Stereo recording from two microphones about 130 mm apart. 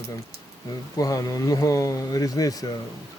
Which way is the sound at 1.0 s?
25° left (ahead or behind).